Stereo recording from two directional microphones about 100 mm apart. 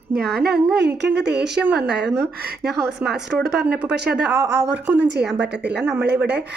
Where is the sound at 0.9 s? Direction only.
10° right (ahead or behind).